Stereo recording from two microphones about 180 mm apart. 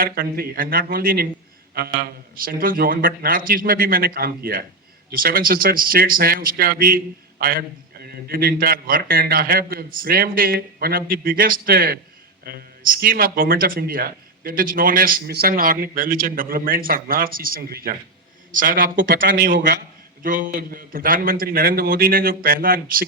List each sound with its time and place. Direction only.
0.0 s a man's voice: 55° right (ahead or behind)